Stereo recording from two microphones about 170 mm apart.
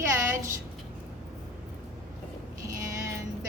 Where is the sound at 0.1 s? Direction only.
15° right (ahead or behind).